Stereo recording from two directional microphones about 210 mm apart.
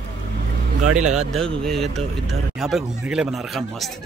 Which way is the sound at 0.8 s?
90° right.